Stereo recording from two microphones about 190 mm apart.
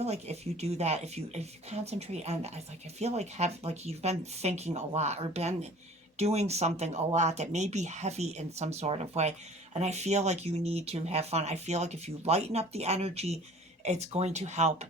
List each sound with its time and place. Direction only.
0.0 s speech: 35° right (ahead or behind)